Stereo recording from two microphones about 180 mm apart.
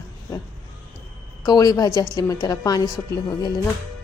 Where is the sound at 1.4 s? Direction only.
20° left (ahead or behind).